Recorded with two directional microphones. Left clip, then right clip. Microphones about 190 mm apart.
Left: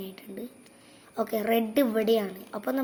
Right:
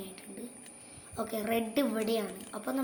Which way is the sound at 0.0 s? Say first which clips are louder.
Left 5 dB; 40° left (ahead or behind).